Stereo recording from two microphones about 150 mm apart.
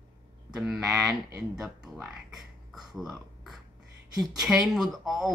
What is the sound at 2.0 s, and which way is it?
Speech, centre (ahead or behind).